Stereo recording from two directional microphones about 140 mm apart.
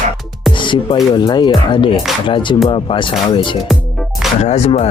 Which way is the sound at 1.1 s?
35° left (ahead or behind).